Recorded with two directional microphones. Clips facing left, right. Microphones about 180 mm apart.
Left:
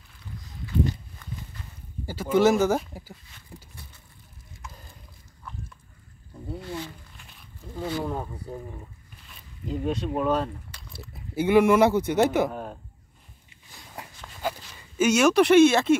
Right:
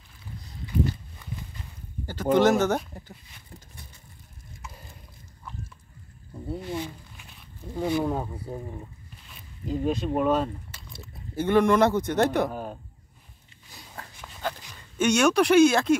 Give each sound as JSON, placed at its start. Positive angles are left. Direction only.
{"t": 2.0, "sound": "speech", "side_deg": 10}
{"t": 6.6, "sound": "speech", "side_deg": -15}
{"t": 14.2, "sound": "dog", "side_deg": 5}
{"t": 14.7, "sound": "speech", "side_deg": 5}